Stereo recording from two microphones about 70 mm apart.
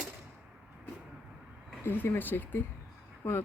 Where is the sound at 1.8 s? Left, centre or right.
Left.